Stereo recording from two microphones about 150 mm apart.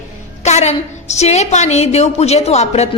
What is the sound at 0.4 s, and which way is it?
A woman's voice, 50° left (ahead or behind).